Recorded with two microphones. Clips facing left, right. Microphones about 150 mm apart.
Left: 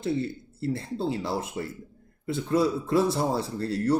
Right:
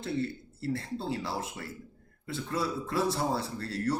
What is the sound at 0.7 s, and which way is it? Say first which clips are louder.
Speech: left 4 dB; 20° left (ahead or behind).